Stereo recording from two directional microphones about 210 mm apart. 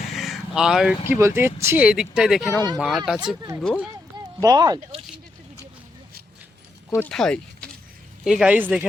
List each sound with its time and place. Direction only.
0.1 s speech: centre (ahead or behind)
4.4 s speech: 20° right (ahead or behind)
6.9 s speech: 5° left (ahead or behind)